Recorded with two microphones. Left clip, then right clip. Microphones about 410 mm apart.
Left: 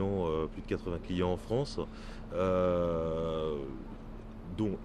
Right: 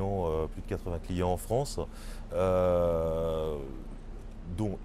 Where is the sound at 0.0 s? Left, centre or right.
Centre.